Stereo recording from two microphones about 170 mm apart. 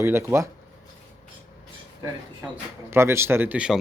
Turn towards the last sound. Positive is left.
turn(degrees=-5)  # may be behind; listen again after turning